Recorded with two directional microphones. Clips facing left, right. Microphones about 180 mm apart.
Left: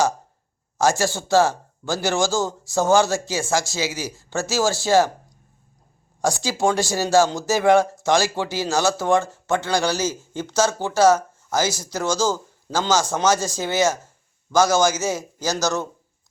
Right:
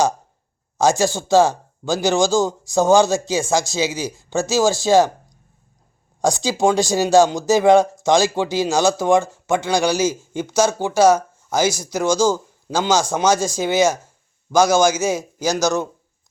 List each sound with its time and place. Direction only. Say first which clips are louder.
0.8 s speech: right 3 dB; 15° right (ahead or behind)
6.2 s speech: right 3 dB; 20° right (ahead or behind)